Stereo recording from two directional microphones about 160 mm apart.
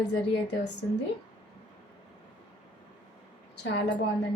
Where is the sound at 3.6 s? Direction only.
90° left.